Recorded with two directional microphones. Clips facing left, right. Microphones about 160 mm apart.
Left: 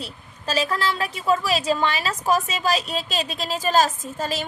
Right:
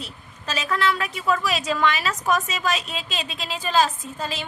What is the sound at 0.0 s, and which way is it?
A woman's voice, 35° left (ahead or behind).